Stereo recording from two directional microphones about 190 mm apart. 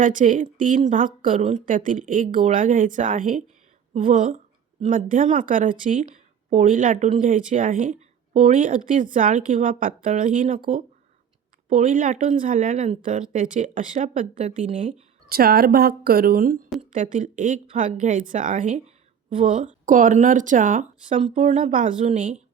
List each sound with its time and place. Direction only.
0.0 s speech: 45° right (ahead or behind)
11.7 s speech: 40° right (ahead or behind)
21.3 s speech: 30° right (ahead or behind)
21.7 s speech: 45° right (ahead or behind)